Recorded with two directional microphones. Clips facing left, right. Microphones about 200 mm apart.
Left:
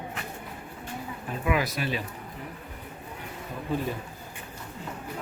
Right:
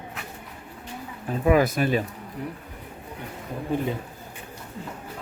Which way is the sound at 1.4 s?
45° right (ahead or behind).